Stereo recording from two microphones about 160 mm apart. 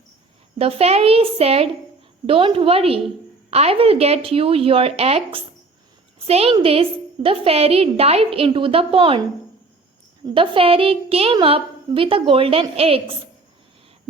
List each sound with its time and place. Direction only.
0.6 s a woman's voice: 40° right (ahead or behind)
10.3 s a woman's voice: 35° right (ahead or behind)